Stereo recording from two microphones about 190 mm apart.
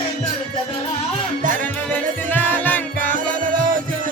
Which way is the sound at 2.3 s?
10° left (ahead or behind).